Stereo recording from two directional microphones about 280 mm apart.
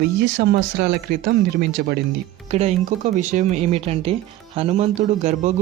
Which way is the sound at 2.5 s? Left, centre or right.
Right.